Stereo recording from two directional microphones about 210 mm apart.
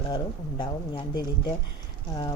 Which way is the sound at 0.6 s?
20° left (ahead or behind).